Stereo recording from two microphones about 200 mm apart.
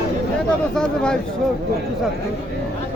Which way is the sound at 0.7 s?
5° left (ahead or behind).